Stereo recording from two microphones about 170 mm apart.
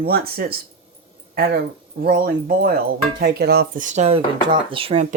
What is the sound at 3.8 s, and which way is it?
Speech, 40° right (ahead or behind).